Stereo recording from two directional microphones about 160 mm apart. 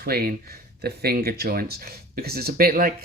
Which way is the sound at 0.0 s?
70° right (ahead or behind).